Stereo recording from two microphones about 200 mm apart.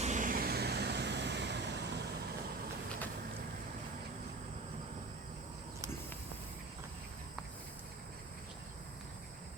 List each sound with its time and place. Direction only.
0.0 s vehicle: 40° right (ahead or behind); by 2.0 s 60° right (ahead or behind)